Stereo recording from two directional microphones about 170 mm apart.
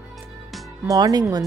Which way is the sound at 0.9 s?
20° right (ahead or behind).